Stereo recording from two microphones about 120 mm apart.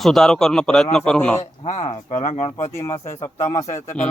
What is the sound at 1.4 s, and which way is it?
Speech, 65° left (ahead or behind).